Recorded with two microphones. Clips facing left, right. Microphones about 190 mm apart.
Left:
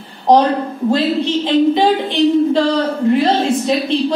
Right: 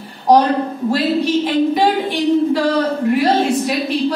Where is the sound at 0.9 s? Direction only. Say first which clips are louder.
Right 1 dB; 25° left (ahead or behind).